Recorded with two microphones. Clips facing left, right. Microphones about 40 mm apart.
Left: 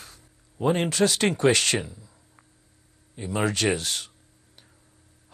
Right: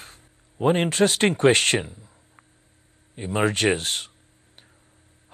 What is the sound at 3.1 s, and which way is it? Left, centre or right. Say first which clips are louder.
Speech: right 3 dB; right.